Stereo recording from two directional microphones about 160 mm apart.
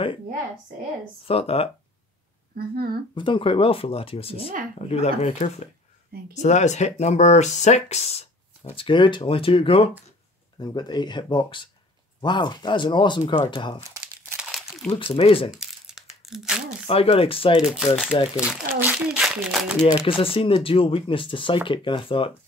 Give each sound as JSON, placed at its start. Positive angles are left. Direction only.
{"t": 1.2, "sound": "speech", "side_deg": 35}
{"t": 2.5, "sound": "speech", "side_deg": -70}
{"t": 3.2, "sound": "speech", "side_deg": 30}
{"t": 14.8, "sound": "speech", "side_deg": 5}
{"t": 15.1, "sound": "speech", "side_deg": 35}
{"t": 15.5, "sound": "crumpling", "side_deg": 0}
{"t": 16.8, "sound": "speech", "side_deg": 35}
{"t": 17.6, "sound": "speech", "side_deg": -5}
{"t": 19.8, "sound": "speech", "side_deg": 30}